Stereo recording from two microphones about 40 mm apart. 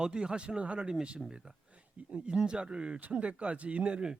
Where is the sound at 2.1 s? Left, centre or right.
Right.